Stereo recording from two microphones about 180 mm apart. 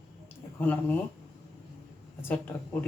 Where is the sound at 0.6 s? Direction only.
10° left (ahead or behind).